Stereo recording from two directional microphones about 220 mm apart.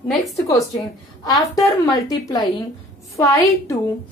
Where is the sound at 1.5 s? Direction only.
15° left (ahead or behind).